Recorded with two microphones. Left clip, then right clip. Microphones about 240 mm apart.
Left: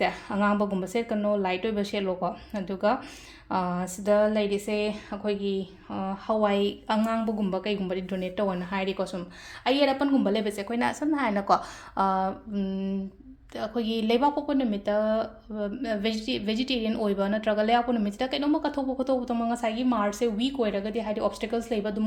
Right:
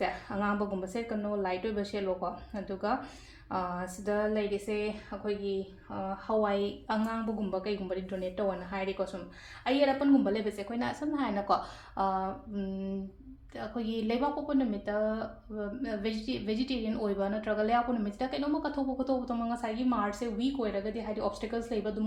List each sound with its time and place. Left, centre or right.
0.0 s speech: left